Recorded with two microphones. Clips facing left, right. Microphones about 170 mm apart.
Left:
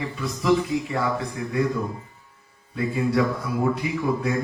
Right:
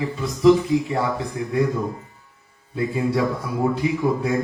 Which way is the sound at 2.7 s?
25° right (ahead or behind).